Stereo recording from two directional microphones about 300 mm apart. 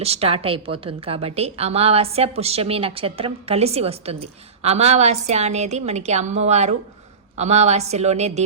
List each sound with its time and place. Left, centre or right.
0.0 s a woman's voice: centre